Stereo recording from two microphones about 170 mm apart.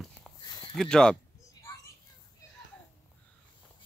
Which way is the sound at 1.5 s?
25° left (ahead or behind).